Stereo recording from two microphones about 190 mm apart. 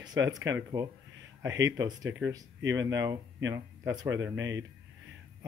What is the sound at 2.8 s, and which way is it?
Speech, 20° right (ahead or behind).